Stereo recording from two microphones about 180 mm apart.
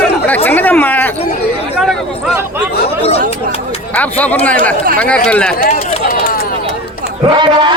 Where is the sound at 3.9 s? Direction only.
10° left (ahead or behind).